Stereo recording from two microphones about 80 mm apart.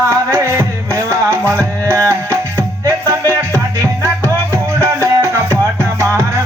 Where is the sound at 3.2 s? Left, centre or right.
Left.